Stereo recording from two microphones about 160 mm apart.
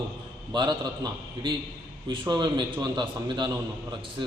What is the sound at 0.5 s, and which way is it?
A man's voice, 25° right (ahead or behind).